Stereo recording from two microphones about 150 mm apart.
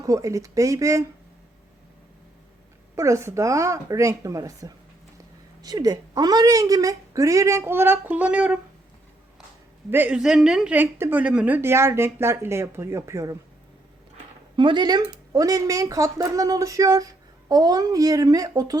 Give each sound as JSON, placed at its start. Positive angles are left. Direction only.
{"t": 0.0, "sound": "a woman's voice", "side_deg": -20}
{"t": 2.9, "sound": "a woman's voice", "side_deg": -20}
{"t": 9.9, "sound": "a woman's voice", "side_deg": -10}
{"t": 14.5, "sound": "a woman's voice", "side_deg": -30}